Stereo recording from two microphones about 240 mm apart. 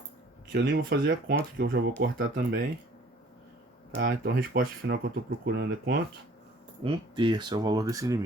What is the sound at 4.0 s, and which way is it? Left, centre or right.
Speech, right.